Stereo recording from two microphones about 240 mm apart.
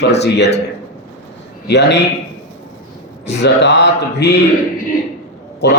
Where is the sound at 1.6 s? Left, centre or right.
Left.